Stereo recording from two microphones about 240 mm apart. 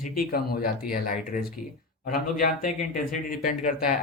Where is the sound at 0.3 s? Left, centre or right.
Left.